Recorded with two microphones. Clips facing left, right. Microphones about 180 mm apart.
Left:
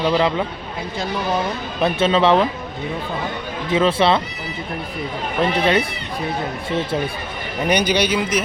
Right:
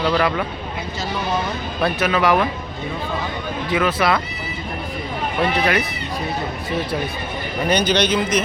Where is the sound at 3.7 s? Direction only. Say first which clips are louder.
Left 3 dB; 30° left (ahead or behind).